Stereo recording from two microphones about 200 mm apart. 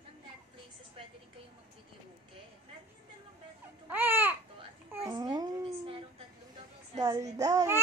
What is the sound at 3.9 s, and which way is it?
Babbling, 10° right (ahead or behind).